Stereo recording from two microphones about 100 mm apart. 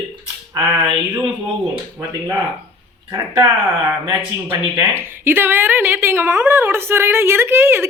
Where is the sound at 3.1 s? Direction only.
25° right (ahead or behind).